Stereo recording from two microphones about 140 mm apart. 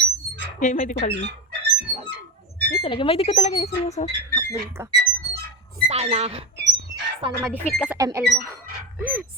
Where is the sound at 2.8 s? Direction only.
40° left (ahead or behind).